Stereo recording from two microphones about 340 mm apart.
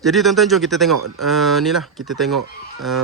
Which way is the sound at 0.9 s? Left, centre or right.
Right.